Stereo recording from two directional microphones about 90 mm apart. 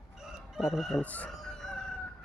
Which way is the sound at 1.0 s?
15° left (ahead or behind).